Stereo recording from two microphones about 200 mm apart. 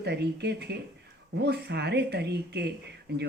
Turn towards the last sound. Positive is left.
turn(degrees=-55)  # may be behind; listen again after turning